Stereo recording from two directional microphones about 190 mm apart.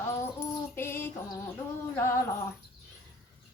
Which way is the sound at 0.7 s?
10° left (ahead or behind).